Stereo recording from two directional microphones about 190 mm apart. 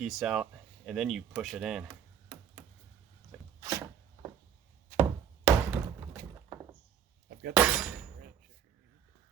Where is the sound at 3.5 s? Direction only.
15° right (ahead or behind).